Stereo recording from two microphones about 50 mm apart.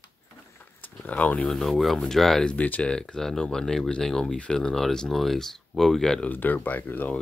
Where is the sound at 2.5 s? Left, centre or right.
Left.